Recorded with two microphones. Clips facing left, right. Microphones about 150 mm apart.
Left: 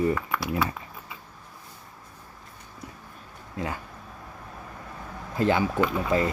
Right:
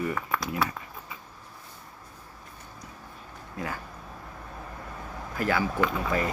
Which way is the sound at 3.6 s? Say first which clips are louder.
Left 3 dB; 20° left (ahead or behind).